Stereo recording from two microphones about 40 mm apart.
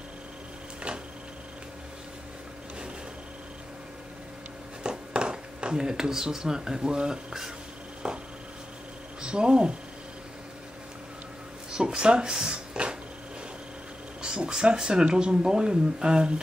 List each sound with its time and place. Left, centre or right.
4.8 s speech: right
8.0 s a sound: right
9.2 s speech: right
11.7 s speech: right
14.2 s speech: right